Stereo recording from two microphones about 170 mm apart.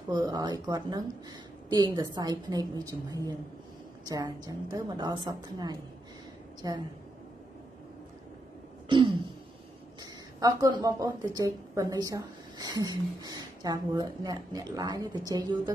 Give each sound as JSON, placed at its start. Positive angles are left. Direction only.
{"t": 0.1, "sound": "a woman's voice", "side_deg": -25}
{"t": 8.8, "sound": "throat clearing", "side_deg": -25}
{"t": 10.4, "sound": "a woman's voice", "side_deg": -20}